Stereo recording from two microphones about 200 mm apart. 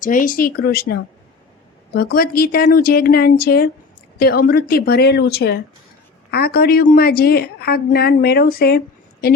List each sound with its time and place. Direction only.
0.0 s a woman's voice: 40° left (ahead or behind)